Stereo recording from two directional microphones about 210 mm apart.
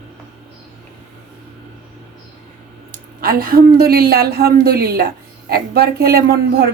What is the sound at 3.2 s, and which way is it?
A woman's voice, 45° right (ahead or behind).